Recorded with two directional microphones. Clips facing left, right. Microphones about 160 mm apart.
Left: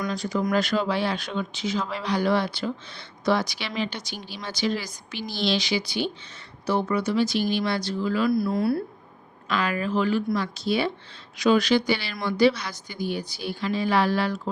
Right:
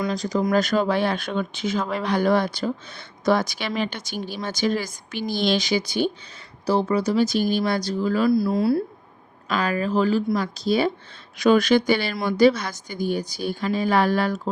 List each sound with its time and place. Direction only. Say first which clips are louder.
0.0 s speech: right 3 dB; 40° right (ahead or behind)
6.7 s speech: right 3 dB; 35° right (ahead or behind)
8.3 s speech: right 3 dB; 25° right (ahead or behind)
9.5 s speech: right 2 dB; 40° right (ahead or behind)